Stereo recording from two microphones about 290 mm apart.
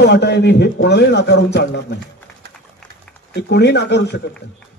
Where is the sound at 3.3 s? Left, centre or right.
Left.